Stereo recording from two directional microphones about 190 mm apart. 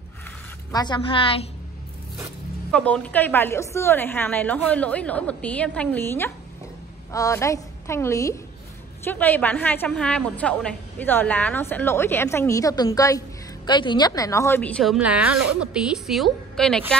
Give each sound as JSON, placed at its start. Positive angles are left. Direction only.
{"t": 0.7, "sound": "a woman's voice", "side_deg": 20}
{"t": 2.7, "sound": "a woman's voice", "side_deg": 5}